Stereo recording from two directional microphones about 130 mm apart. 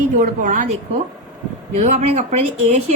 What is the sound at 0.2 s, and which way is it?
Speech, 90° right.